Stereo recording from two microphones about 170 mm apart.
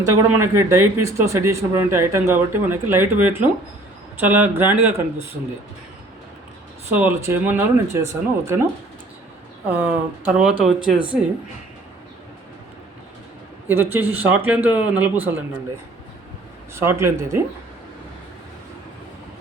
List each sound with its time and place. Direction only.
0.0 s speech: 20° right (ahead or behind)
6.9 s speech: 10° right (ahead or behind)
9.6 s speech: 10° right (ahead or behind)
13.7 s speech: 10° right (ahead or behind)
16.7 s speech: 15° right (ahead or behind)